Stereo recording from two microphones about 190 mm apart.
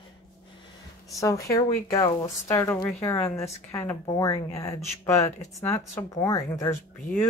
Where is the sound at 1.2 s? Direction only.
15° left (ahead or behind).